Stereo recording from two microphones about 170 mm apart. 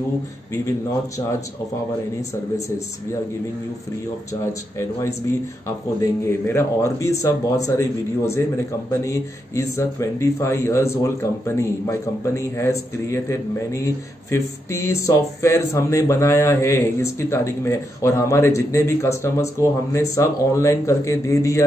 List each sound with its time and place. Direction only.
4.3 s speech: 15° left (ahead or behind)